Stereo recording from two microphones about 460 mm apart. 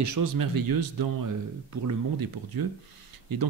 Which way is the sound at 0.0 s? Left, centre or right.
Right.